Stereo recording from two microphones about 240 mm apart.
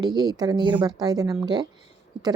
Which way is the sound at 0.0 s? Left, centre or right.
Centre.